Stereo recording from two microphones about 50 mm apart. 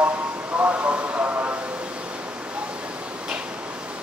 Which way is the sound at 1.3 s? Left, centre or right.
Right.